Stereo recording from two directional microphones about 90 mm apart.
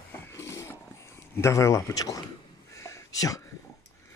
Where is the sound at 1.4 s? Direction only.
35° left (ahead or behind).